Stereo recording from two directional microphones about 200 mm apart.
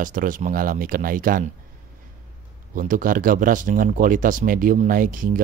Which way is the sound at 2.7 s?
40° right (ahead or behind).